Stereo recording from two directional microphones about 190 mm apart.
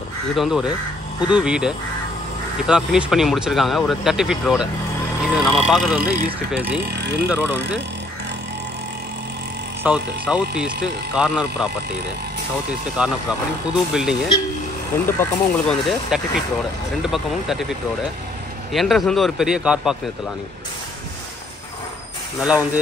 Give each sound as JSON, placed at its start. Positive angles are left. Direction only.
{"t": 0.4, "sound": "speech", "side_deg": -5}
{"t": 6.9, "sound": "speech", "side_deg": -60}
{"t": 7.2, "sound": "speech", "side_deg": -10}
{"t": 9.8, "sound": "speech", "side_deg": -5}
{"t": 13.0, "sound": "speech", "side_deg": -5}
{"t": 15.0, "sound": "speech", "side_deg": 10}
{"t": 22.4, "sound": "speech", "side_deg": -5}